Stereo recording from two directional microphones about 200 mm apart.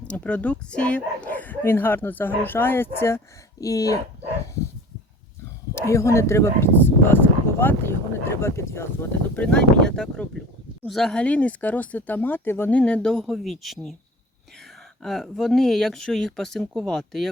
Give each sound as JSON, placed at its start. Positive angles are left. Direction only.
{"t": 0.1, "sound": "speech", "side_deg": 5}
{"t": 5.7, "sound": "speech", "side_deg": 15}
{"t": 15.0, "sound": "speech", "side_deg": 0}